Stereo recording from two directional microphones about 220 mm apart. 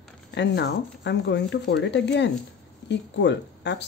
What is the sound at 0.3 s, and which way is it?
Speech, 50° left (ahead or behind).